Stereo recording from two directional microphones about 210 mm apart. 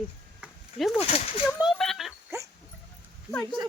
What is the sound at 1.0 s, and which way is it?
Speech, 30° left (ahead or behind).